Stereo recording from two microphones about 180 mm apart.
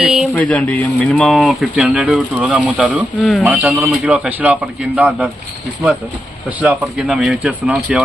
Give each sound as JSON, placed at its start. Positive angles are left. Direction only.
{"t": 0.0, "sound": "a sound", "side_deg": 0}
{"t": 0.3, "sound": "speech", "side_deg": 10}
{"t": 6.6, "sound": "speech", "side_deg": -5}